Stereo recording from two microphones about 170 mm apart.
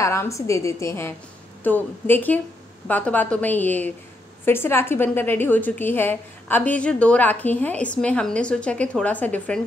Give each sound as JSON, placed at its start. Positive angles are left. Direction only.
{"t": 0.0, "sound": "a woman's voice", "side_deg": 15}